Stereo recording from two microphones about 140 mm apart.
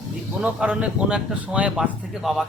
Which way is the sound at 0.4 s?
10° right (ahead or behind).